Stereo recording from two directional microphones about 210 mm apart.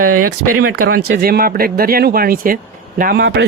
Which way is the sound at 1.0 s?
45° right (ahead or behind).